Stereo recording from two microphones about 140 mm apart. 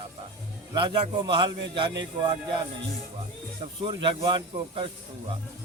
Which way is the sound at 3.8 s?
35° right (ahead or behind).